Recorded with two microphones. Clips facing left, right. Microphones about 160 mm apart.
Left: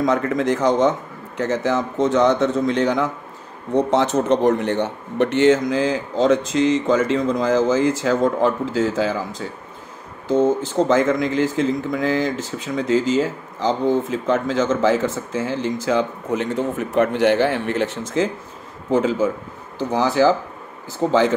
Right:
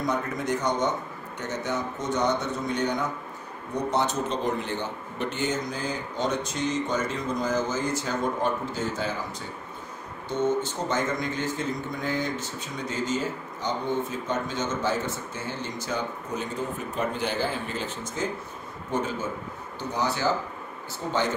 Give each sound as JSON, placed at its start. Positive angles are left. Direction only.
{"t": 0.0, "sound": "a man's voice", "side_deg": 90}
{"t": 10.8, "sound": "a man's voice", "side_deg": 90}
{"t": 19.8, "sound": "a man's voice", "side_deg": 90}